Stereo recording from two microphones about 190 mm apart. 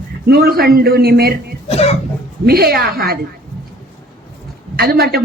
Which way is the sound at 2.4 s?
55° right (ahead or behind).